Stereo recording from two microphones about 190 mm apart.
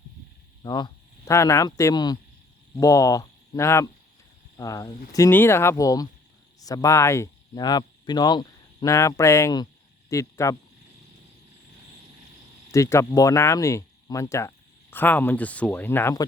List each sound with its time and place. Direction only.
0.6 s speech: 25° left (ahead or behind)
12.7 s speech: 15° left (ahead or behind)